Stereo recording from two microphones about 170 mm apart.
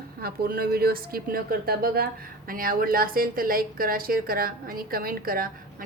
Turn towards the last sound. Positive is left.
turn(degrees=-60)  # may be behind; listen again after turning